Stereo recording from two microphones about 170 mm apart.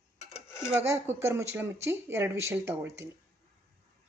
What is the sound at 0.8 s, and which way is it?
Speech, 15° right (ahead or behind).